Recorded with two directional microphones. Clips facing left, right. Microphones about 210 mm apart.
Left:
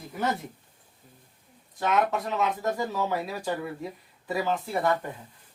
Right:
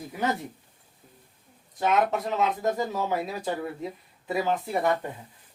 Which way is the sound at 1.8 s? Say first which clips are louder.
Right 1 dB; 20° right (ahead or behind).